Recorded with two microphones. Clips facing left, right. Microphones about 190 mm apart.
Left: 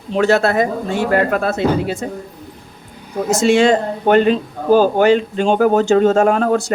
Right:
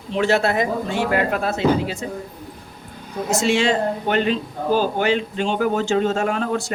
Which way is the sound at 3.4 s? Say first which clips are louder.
Left 7 dB; 45° left (ahead or behind).